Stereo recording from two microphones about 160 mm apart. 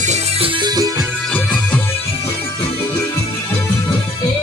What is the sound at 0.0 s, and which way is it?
Music, 40° right (ahead or behind).